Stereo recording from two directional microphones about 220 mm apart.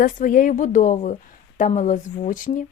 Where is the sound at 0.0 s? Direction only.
40° left (ahead or behind).